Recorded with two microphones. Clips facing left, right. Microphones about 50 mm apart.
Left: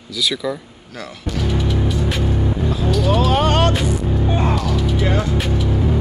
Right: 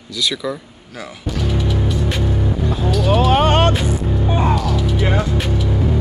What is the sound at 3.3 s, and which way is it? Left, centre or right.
Speech, right.